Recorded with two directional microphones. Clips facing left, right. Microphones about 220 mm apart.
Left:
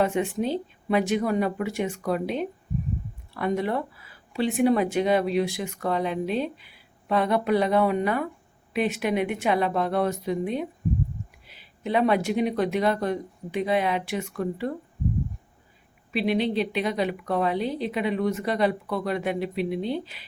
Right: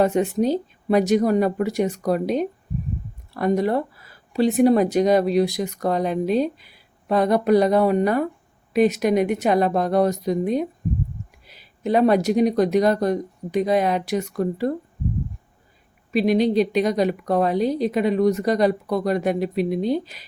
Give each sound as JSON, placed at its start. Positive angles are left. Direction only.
{"t": 0.0, "sound": "speech", "side_deg": -40}
{"t": 16.1, "sound": "speech", "side_deg": -40}